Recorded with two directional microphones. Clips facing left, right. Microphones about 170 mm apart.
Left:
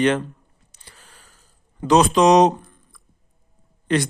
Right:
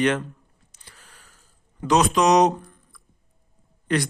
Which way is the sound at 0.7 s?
30° left (ahead or behind).